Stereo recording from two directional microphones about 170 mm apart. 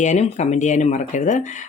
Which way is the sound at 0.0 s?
45° left (ahead or behind).